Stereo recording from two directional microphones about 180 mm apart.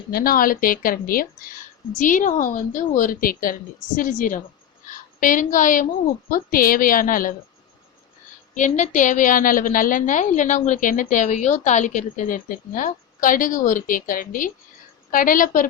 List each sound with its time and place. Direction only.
0.1 s a woman's voice: 55° left (ahead or behind)
8.5 s a woman's voice: 45° left (ahead or behind)